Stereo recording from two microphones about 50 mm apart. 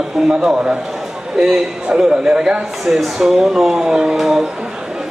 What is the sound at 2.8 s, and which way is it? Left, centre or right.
A man's voice, centre.